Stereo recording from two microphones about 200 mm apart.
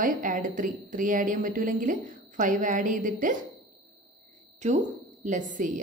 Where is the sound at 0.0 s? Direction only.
40° right (ahead or behind).